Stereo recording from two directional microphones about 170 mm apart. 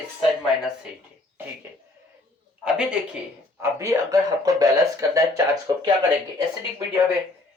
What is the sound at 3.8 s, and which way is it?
Speech, 20° right (ahead or behind).